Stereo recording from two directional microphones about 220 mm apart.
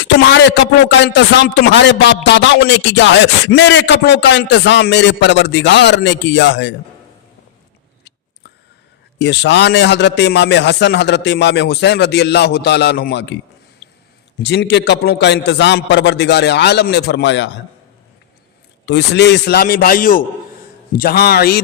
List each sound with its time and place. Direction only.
0.0 s a man's voice: 55° left (ahead or behind)
9.1 s a man's voice: 50° left (ahead or behind)
18.9 s a man's voice: 50° left (ahead or behind)